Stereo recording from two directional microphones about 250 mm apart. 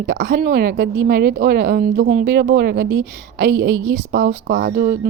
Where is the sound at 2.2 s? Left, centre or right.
Right.